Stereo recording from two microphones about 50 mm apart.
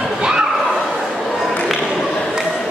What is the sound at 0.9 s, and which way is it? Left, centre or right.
Bow-wow, centre.